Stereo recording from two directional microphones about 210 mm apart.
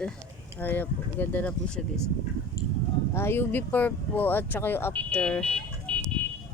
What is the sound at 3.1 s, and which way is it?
Speech, 10° left (ahead or behind).